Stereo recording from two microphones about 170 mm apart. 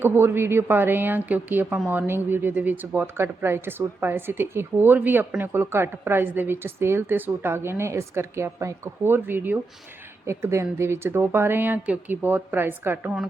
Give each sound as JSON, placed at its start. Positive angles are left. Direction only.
{"t": 0.0, "sound": "speech", "side_deg": -15}